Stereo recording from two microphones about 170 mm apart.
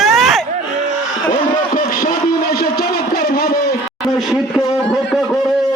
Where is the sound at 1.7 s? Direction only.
55° left (ahead or behind).